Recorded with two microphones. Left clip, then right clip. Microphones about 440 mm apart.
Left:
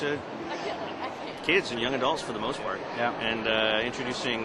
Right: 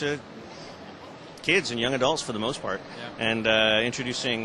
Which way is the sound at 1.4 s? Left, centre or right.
Right.